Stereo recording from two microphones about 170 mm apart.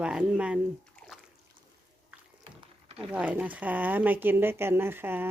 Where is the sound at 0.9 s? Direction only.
Centre (ahead or behind).